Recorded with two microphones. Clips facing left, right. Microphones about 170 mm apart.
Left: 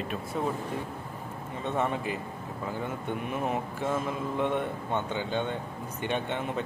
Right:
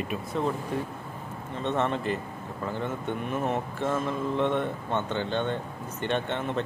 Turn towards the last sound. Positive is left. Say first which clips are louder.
# right 2 dB
turn(degrees=10)  # may be behind; listen again after turning